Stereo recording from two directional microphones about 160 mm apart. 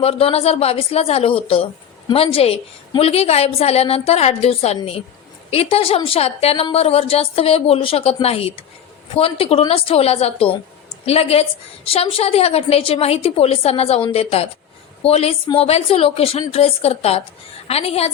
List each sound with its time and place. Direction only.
0.0 s a woman's voice: 35° left (ahead or behind)